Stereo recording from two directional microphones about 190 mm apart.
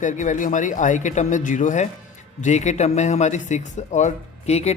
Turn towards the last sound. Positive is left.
turn(degrees=35)  # may be behind; listen again after turning